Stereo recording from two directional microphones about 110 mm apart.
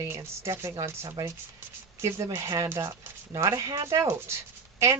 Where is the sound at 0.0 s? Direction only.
25° right (ahead or behind).